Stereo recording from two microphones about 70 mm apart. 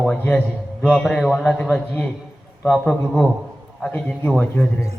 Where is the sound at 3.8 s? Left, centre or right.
Centre.